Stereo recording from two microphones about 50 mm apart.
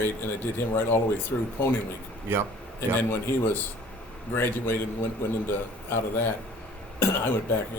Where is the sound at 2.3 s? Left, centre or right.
Right.